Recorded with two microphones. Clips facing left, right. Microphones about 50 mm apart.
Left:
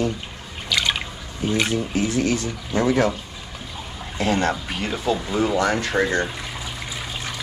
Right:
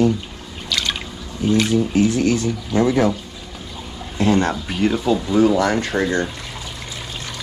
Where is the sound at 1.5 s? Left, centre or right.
Centre.